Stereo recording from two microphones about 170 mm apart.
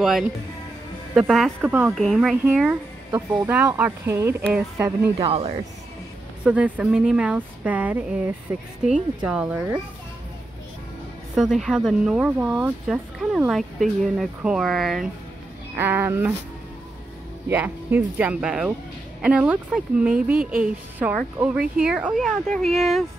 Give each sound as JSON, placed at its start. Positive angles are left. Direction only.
{"t": 0.0, "sound": "a woman's voice", "side_deg": 0}
{"t": 2.0, "sound": "a woman's voice", "side_deg": 0}
{"t": 5.1, "sound": "speech", "side_deg": -35}
{"t": 6.4, "sound": "a woman's voice", "side_deg": -5}
{"t": 11.3, "sound": "a woman's voice", "side_deg": 0}
{"t": 12.8, "sound": "speech", "side_deg": 0}
{"t": 15.7, "sound": "a woman's voice", "side_deg": -15}
{"t": 17.5, "sound": "a woman's voice", "side_deg": -10}